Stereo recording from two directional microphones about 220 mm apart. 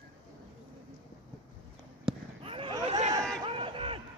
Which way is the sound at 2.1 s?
25° right (ahead or behind).